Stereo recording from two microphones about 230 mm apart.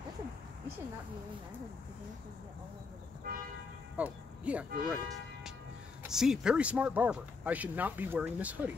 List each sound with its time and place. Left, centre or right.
3.3 s toot: right
3.9 s speech: centre
6.0 s speech: centre